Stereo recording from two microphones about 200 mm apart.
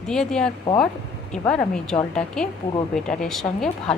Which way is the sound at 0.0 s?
5° left (ahead or behind).